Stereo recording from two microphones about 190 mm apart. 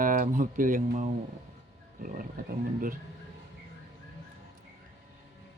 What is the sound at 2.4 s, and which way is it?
Speech, 45° right (ahead or behind).